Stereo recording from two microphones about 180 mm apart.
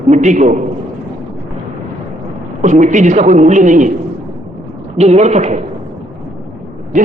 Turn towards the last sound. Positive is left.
turn(degrees=-45)  # may be behind; listen again after turning